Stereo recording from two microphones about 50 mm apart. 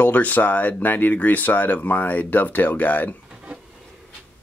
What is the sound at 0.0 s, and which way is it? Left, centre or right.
Speech, left.